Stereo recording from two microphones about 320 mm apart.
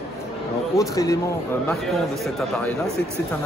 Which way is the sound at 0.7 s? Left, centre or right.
Centre.